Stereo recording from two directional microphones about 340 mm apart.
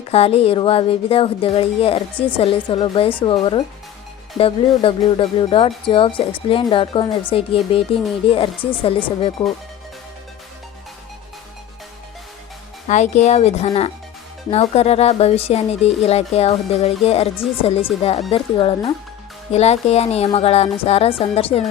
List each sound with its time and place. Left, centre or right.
0.1 s speech: centre
12.9 s speech: centre